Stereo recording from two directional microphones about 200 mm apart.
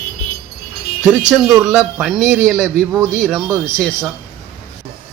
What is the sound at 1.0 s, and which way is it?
Speech, 5° right (ahead or behind).